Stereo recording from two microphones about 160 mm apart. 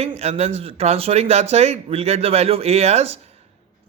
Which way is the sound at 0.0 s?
40° right (ahead or behind).